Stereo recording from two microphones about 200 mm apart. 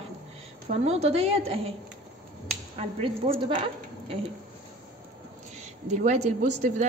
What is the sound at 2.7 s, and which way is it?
Speech, 30° right (ahead or behind).